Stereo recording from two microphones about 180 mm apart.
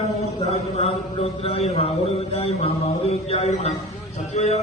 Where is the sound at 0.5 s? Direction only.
35° left (ahead or behind).